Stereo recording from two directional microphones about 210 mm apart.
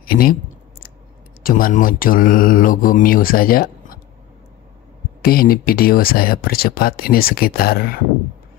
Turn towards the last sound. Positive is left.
turn(degrees=45)  # may be behind; listen again after turning